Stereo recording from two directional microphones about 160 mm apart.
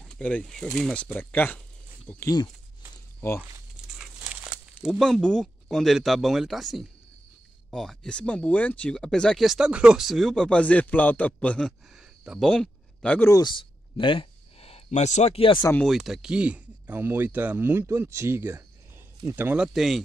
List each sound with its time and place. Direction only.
0.0 s speech: 5° left (ahead or behind)
4.0 s speech: 5° right (ahead or behind)
13.3 s speech: 30° left (ahead or behind)
15.7 s speech: centre (ahead or behind)